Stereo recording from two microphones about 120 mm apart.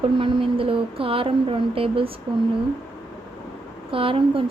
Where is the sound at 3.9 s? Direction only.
50° right (ahead or behind).